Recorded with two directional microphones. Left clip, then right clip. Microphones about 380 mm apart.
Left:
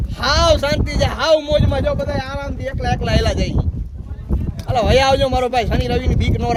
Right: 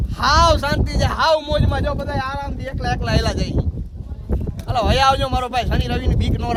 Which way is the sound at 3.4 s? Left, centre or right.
Right.